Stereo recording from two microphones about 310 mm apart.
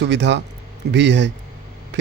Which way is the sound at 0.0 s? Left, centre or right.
Right.